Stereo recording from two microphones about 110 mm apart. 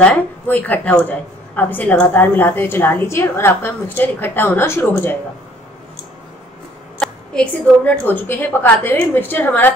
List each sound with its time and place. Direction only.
0.0 s a woman's voice: 15° left (ahead or behind)
7.0 s a woman's voice: 10° left (ahead or behind)